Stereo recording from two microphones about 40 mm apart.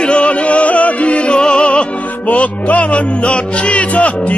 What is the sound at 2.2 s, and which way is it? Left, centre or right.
Music, left.